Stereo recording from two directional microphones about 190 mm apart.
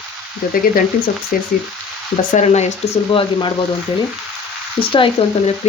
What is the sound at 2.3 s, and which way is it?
Speech, 35° left (ahead or behind).